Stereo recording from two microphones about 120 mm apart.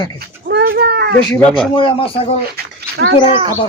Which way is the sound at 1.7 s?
45° left (ahead or behind).